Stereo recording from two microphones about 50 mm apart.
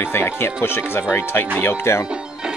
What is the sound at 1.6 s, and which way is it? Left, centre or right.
Speech, left.